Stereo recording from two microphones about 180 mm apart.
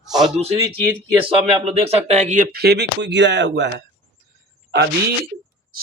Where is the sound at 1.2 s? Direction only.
35° right (ahead or behind); by 3.9 s 75° right (ahead or behind).